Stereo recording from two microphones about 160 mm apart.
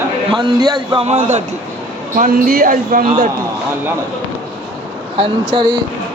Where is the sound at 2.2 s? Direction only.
65° right (ahead or behind).